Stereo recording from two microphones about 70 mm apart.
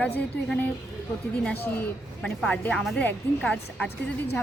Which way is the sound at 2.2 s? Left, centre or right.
Centre.